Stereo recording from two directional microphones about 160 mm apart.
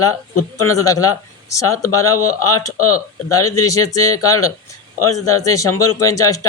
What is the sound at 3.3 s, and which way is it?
A man's voice, 20° left (ahead or behind).